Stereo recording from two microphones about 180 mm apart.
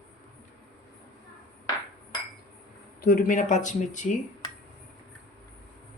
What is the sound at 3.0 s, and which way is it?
Speech, 50° left (ahead or behind).